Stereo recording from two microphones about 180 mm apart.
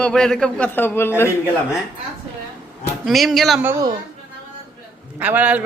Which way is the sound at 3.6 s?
15° right (ahead or behind).